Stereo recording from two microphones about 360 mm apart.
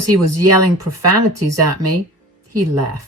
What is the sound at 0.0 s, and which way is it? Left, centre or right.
Speech, right.